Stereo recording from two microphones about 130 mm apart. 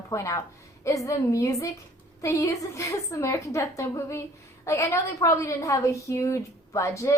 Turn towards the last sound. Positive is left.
turn(degrees=20)  # may be behind; listen again after turning